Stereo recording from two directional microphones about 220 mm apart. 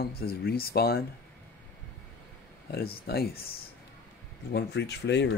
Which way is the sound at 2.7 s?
45° left (ahead or behind).